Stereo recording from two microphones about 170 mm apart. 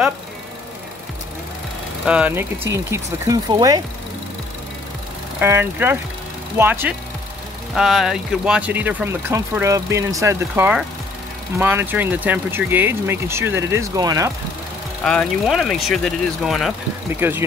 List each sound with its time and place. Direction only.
2.0 s speech: 10° right (ahead or behind); by 3.8 s 25° right (ahead or behind)
5.4 s speech: 15° right (ahead or behind)
15.0 s speech: centre (ahead or behind)
17.1 s speech: 15° right (ahead or behind)